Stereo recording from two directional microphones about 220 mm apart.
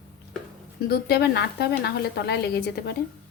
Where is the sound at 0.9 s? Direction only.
45° left (ahead or behind).